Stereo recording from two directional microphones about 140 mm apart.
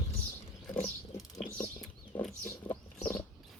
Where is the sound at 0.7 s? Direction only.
20° left (ahead or behind).